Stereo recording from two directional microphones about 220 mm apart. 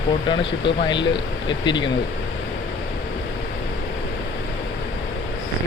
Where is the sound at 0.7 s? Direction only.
20° left (ahead or behind).